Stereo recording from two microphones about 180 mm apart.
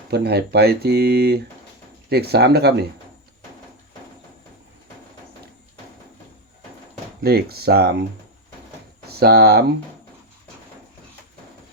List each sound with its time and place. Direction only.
0.1 s speech: 65° right (ahead or behind)
7.2 s speech: 60° right (ahead or behind)
9.0 s speech: 60° right (ahead or behind)